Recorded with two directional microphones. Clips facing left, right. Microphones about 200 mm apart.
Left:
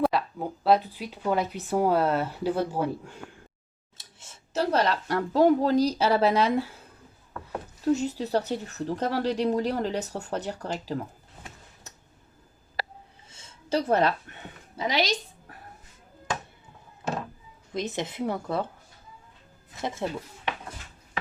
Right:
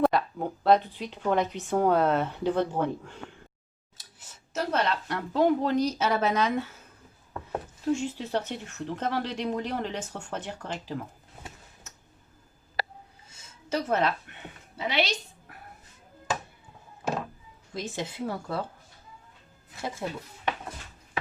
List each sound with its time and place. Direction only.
0.0 s speech: 5° left (ahead or behind)
3.9 s speech: 25° left (ahead or behind)
7.9 s speech: 40° left (ahead or behind)
13.3 s a sound: 30° left (ahead or behind)
14.8 s speech: 35° left (ahead or behind)
17.7 s speech: 20° left (ahead or behind)
20.0 s speech: 25° left (ahead or behind)